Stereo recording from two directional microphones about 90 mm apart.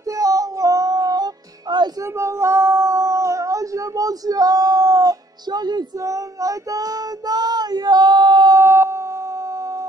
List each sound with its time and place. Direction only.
0.1 s music: 40° right (ahead or behind)
2.0 s female singing: 30° right (ahead or behind); by 5.9 s 50° right (ahead or behind)
5.9 s female singing: 40° right (ahead or behind)
8.5 s howl: 30° right (ahead or behind)